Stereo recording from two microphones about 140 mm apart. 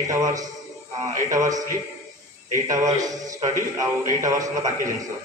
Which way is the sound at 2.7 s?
25° right (ahead or behind).